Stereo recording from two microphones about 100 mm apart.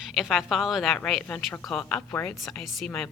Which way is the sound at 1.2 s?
20° left (ahead or behind).